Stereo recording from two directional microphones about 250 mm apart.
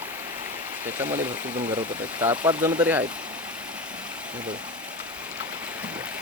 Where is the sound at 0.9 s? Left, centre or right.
Centre.